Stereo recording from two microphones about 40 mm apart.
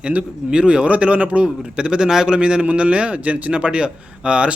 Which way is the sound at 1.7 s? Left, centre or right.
Right.